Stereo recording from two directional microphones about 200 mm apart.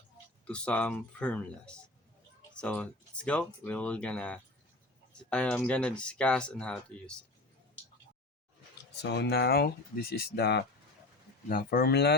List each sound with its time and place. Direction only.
0.4 s speech: 5° left (ahead or behind)
9.0 s speech: 55° left (ahead or behind)